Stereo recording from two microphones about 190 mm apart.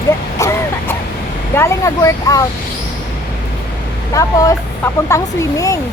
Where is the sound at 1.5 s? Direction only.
15° left (ahead or behind).